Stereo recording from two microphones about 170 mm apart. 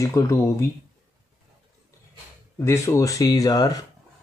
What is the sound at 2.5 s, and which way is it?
Speech, 15° left (ahead or behind).